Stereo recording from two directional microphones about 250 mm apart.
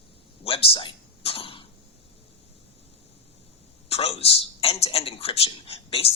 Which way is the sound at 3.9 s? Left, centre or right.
Left.